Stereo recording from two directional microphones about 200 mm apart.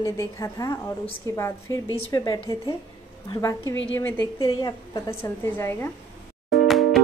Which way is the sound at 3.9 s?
10° left (ahead or behind).